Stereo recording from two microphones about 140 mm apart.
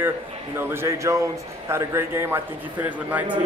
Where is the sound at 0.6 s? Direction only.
20° right (ahead or behind).